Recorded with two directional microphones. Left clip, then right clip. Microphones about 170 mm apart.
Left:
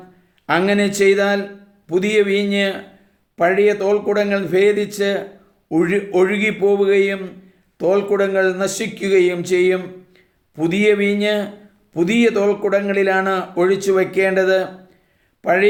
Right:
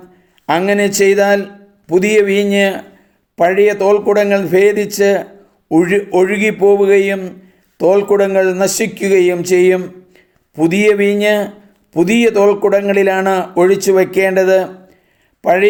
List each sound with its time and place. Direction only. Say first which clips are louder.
0.4 s speech: right 4 dB; 50° right (ahead or behind)